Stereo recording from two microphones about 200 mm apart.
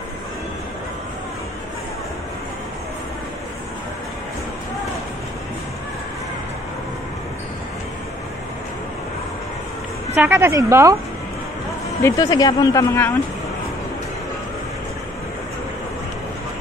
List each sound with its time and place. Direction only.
10.1 s a woman's voice: 10° right (ahead or behind)
12.0 s speech: 20° left (ahead or behind)